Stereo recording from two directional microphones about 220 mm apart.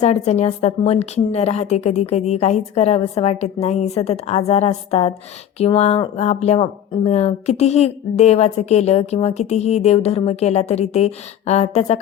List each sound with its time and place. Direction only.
0.0 s speech: 30° left (ahead or behind)